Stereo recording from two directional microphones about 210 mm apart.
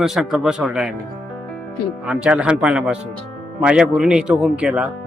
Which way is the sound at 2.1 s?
5° right (ahead or behind).